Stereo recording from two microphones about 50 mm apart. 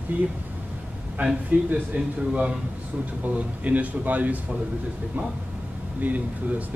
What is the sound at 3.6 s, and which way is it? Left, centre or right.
Speech, right.